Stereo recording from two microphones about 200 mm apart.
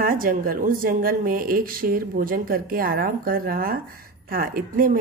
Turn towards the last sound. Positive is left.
turn(degrees=-45)  # may be behind; listen again after turning